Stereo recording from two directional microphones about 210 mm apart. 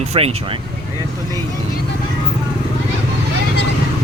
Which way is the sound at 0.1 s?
25° right (ahead or behind).